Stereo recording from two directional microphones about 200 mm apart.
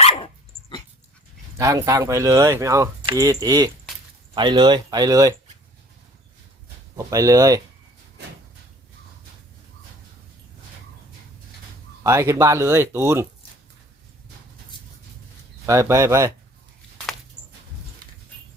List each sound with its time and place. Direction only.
0.0 s dog: 30° left (ahead or behind)
1.5 s speech: 15° right (ahead or behind)
6.9 s speech: 15° right (ahead or behind)
12.0 s speech: 15° right (ahead or behind)
15.6 s speech: 15° right (ahead or behind)